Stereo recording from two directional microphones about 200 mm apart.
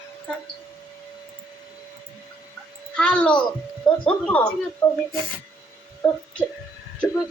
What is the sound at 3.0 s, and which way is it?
A child's voice, 5° left (ahead or behind).